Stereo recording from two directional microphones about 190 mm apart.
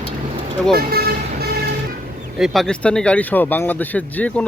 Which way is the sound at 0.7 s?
55° right (ahead or behind).